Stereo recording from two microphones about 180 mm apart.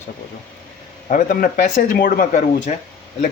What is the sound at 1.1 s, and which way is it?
Speech, 45° left (ahead or behind).